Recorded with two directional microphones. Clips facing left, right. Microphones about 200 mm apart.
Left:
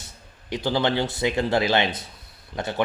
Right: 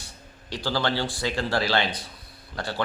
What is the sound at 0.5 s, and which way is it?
Speech, 20° left (ahead or behind).